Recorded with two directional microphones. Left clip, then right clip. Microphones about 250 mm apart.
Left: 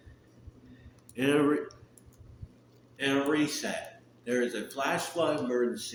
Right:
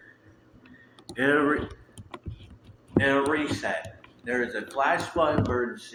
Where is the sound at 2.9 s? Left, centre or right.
Left.